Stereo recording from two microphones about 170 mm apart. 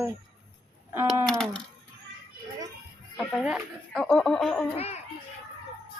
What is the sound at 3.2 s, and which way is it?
Speech, centre (ahead or behind).